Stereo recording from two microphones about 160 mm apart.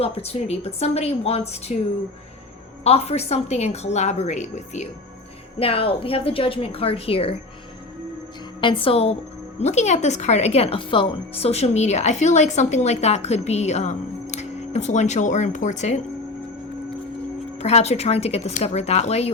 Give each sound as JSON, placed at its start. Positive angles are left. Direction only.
{"t": 0.0, "sound": "a woman's voice", "side_deg": 40}
{"t": 2.8, "sound": "speech", "side_deg": 40}
{"t": 5.5, "sound": "a woman's voice", "side_deg": 35}
{"t": 8.6, "sound": "a woman's voice", "side_deg": 35}
{"t": 17.6, "sound": "speech", "side_deg": 45}